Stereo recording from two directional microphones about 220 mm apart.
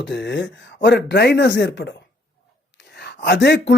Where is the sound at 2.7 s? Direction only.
50° left (ahead or behind).